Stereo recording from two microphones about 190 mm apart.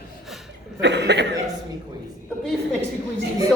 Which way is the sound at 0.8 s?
65° right (ahead or behind).